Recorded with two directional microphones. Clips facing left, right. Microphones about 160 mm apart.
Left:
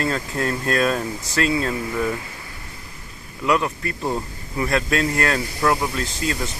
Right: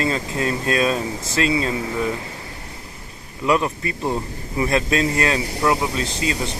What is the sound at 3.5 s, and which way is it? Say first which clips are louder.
Speech: right 1 dB; 20° right (ahead or behind).